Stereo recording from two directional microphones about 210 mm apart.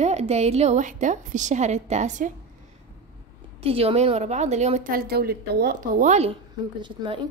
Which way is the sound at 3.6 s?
25° right (ahead or behind).